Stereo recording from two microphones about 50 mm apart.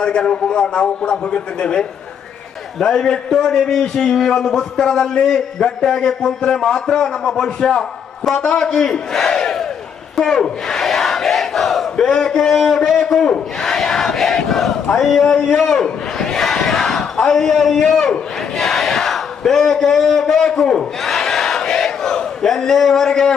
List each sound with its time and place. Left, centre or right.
0.0 s a man's voice: left
10.2 s battle cry: centre
12.1 s speech: centre
13.6 s battle cry: centre
14.9 s speech: centre
15.2 s speech: centre
18.5 s battle cry: centre
19.5 s a sound: centre